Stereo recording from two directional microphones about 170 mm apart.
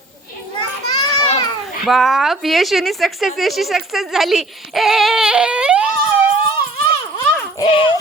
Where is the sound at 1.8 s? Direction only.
Centre (ahead or behind).